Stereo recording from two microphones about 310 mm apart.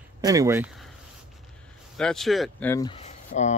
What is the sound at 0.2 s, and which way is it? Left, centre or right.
Speech, centre.